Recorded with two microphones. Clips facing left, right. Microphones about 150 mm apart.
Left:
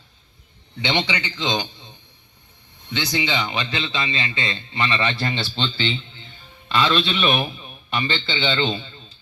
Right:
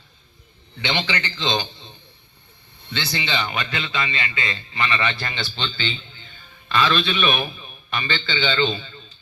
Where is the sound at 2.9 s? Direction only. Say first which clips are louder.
Left 3 dB; 15° left (ahead or behind).